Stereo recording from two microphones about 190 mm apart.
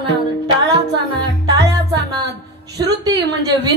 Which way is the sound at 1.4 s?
20° right (ahead or behind).